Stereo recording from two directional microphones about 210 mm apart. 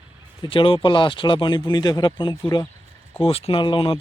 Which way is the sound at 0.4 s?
25° left (ahead or behind).